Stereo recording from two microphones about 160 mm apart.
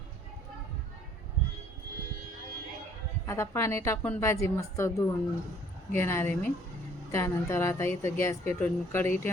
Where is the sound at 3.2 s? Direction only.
20° left (ahead or behind).